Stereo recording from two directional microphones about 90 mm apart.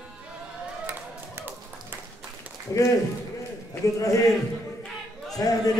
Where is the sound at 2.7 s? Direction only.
35° left (ahead or behind).